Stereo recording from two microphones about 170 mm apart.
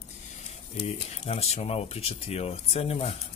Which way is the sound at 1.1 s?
40° left (ahead or behind).